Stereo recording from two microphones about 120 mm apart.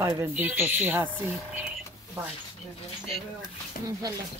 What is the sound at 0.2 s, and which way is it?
Speech, 15° right (ahead or behind).